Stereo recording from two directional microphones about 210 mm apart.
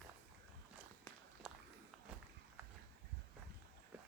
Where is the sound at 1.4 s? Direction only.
Centre (ahead or behind).